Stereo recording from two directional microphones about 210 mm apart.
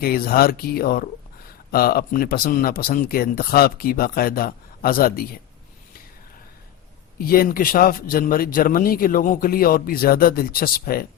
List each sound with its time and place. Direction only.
0.0 s a man's voice: 45° left (ahead or behind)
7.3 s a man's voice: 45° left (ahead or behind)